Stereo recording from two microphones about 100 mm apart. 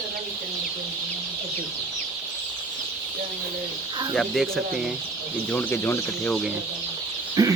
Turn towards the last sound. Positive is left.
turn(degrees=-40)  # may be behind; listen again after turning